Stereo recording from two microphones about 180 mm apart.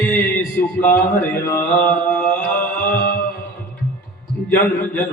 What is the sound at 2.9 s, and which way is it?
Mantra, 60° left (ahead or behind).